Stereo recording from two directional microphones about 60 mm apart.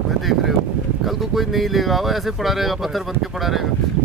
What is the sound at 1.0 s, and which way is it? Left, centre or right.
Speech, centre.